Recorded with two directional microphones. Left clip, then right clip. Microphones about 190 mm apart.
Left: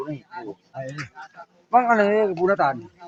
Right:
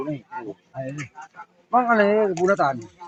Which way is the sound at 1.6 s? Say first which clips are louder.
Left 1 dB; 60° right (ahead or behind).